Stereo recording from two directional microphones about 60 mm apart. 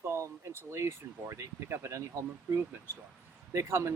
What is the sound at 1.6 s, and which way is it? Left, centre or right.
Speech, right.